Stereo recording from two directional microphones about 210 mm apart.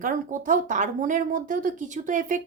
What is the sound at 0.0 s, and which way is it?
A woman's voice, 40° right (ahead or behind).